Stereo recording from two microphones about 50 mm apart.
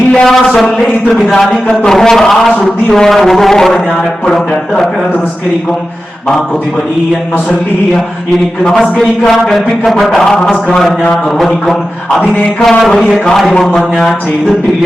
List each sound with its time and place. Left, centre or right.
0.1 s a man's voice: centre
8.6 s a man's voice: centre
12.3 s mantra: left
12.9 s a man's voice: centre
13.5 s mantra: left